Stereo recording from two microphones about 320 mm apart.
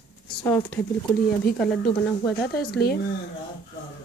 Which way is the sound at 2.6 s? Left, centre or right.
Left.